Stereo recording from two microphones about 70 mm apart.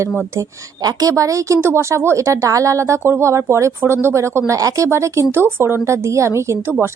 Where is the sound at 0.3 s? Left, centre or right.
Right.